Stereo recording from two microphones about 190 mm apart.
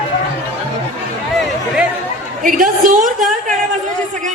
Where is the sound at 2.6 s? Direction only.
45° right (ahead or behind).